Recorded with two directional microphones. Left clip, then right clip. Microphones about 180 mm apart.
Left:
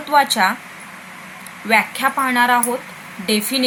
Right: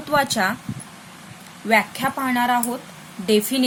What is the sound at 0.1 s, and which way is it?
Speech, 25° right (ahead or behind).